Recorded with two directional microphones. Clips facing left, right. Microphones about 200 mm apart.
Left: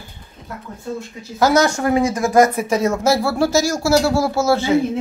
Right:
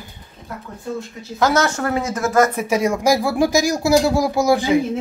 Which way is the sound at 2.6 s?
10° right (ahead or behind).